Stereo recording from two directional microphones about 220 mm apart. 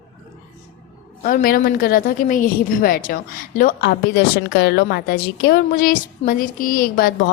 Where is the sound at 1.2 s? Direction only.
40° left (ahead or behind).